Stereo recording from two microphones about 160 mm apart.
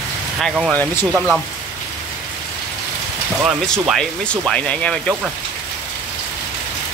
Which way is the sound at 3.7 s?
5° left (ahead or behind).